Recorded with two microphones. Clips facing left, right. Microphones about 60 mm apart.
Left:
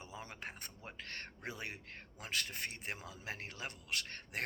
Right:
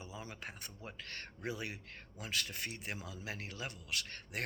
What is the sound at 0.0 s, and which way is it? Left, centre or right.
Speech, left.